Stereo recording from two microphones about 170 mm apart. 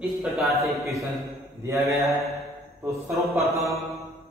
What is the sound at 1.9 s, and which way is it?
Mantra, 15° right (ahead or behind).